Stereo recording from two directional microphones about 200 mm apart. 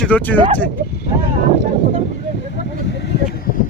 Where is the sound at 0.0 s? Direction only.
5° left (ahead or behind).